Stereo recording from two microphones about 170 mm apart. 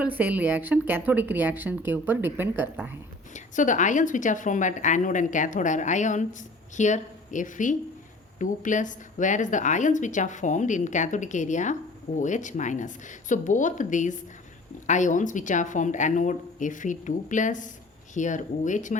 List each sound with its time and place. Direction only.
0.0 s a woman's voice: 10° right (ahead or behind)
3.3 s a woman's voice: 50° left (ahead or behind)